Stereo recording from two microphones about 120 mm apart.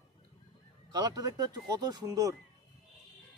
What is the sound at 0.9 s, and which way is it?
Speech, 35° right (ahead or behind).